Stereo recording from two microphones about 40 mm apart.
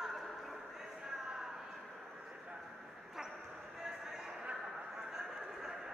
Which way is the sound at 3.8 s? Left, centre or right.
Centre.